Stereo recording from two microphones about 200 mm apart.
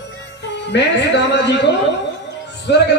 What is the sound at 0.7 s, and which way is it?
Speech, 60° left (ahead or behind).